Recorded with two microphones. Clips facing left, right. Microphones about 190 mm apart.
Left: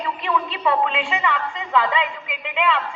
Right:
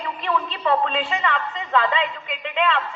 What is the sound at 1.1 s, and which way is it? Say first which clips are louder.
Speech: left 1 dB; 10° left (ahead or behind).